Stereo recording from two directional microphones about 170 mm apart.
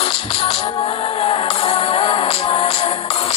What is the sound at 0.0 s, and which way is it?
Music, 35° left (ahead or behind).